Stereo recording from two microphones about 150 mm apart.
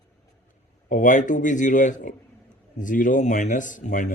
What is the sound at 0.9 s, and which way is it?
Speech, 60° left (ahead or behind).